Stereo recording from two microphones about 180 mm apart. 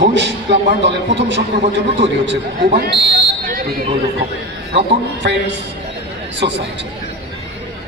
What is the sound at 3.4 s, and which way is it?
Fire alarm, 55° right (ahead or behind).